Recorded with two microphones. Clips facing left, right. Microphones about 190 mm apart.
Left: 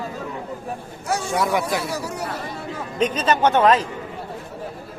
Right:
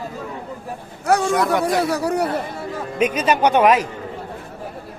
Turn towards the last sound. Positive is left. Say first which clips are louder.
# right 2 dB
turn(degrees=-15)  # may be behind; listen again after turning